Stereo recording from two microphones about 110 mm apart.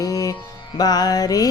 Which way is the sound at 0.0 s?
30° left (ahead or behind).